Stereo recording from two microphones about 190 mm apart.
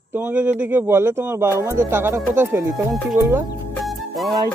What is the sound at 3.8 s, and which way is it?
Music, centre (ahead or behind).